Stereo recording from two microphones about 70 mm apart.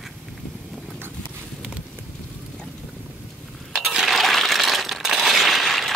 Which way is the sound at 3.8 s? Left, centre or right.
Centre.